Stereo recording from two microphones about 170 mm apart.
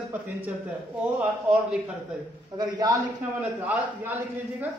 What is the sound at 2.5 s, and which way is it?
Speech, 20° right (ahead or behind).